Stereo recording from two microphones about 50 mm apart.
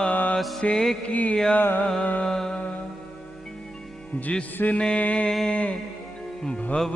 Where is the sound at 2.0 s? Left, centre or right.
Left.